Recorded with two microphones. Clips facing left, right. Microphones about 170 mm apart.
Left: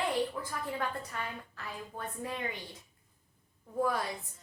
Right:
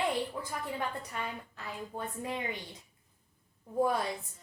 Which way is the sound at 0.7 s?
20° right (ahead or behind).